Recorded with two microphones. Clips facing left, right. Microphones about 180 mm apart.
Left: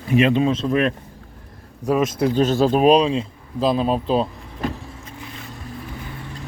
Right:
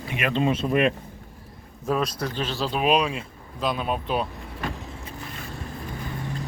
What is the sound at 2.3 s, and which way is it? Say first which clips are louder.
Speech: left 11 dB; 45° left (ahead or behind).